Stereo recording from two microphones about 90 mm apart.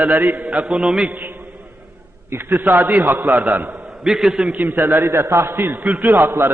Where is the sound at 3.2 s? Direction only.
10° right (ahead or behind).